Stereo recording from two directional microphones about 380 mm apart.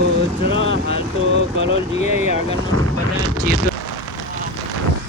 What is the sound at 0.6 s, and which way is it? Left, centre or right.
Speech, right.